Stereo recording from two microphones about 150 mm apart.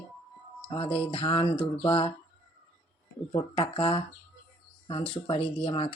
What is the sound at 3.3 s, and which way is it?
Speech, 35° left (ahead or behind).